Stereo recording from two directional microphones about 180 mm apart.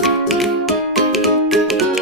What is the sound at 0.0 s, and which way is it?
Music, centre (ahead or behind).